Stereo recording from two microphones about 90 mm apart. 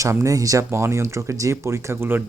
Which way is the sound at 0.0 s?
35° right (ahead or behind).